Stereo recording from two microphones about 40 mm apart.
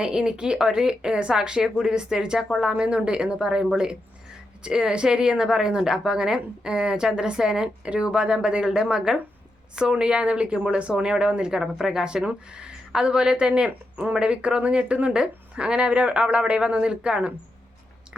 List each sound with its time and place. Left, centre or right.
0.0 s speech: right
2.8 s speech: right
10.0 s speech: right
18.1 s chewing: centre